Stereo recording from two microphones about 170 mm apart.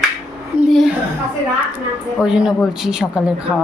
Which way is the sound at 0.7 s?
Centre (ahead or behind).